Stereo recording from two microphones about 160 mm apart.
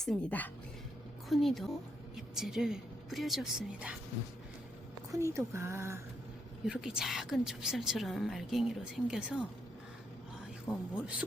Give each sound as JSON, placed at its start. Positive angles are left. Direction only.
{"t": 0.0, "sound": "a woman's voice", "side_deg": 5}
{"t": 5.1, "sound": "speech", "side_deg": -20}
{"t": 6.7, "sound": "a woman's voice", "side_deg": -5}
{"t": 10.7, "sound": "speech", "side_deg": -5}